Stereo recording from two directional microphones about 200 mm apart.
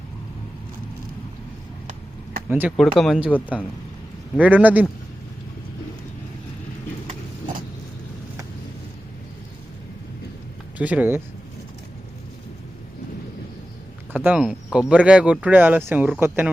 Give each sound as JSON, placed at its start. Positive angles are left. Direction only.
{"t": 2.5, "sound": "speech", "side_deg": -5}
{"t": 4.4, "sound": "speech", "side_deg": -10}
{"t": 7.1, "sound": "vehicle", "side_deg": -40}
{"t": 10.8, "sound": "speech", "side_deg": -5}
{"t": 14.3, "sound": "speech", "side_deg": -5}